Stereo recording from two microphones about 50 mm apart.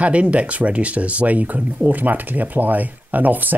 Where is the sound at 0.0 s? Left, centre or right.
Right.